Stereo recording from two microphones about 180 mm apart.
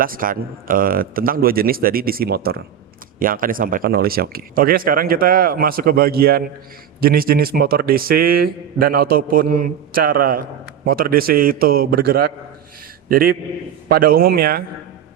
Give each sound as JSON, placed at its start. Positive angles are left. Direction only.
{"t": 0.0, "sound": "a man's voice", "side_deg": -50}